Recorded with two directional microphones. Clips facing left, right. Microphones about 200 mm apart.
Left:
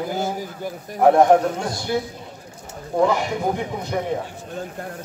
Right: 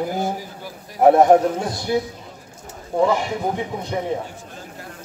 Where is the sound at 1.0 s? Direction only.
20° right (ahead or behind).